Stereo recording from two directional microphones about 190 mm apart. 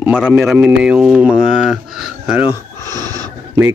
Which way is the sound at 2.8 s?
20° right (ahead or behind).